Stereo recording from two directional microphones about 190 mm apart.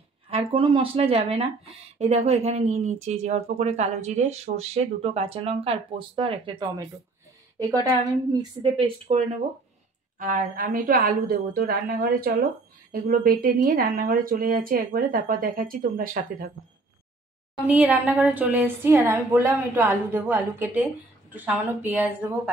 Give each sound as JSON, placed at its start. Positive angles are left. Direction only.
{"t": 0.3, "sound": "a woman's voice", "side_deg": -30}
{"t": 10.1, "sound": "speech", "side_deg": -45}
{"t": 17.6, "sound": "a woman's voice", "side_deg": -10}